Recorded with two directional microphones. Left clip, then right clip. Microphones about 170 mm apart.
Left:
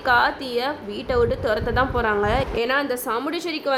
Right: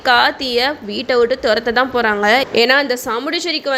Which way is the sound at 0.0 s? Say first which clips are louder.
Right 6 dB; 10° right (ahead or behind).